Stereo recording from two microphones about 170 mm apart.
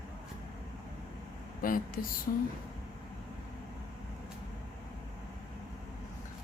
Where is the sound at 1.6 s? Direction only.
55° left (ahead or behind).